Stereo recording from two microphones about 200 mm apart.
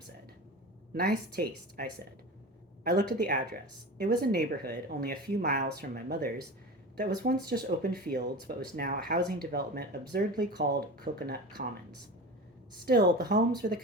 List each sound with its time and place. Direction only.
0.9 s speech: 50° right (ahead or behind)
2.9 s speech: 50° right (ahead or behind)
12.8 s speech: 50° right (ahead or behind)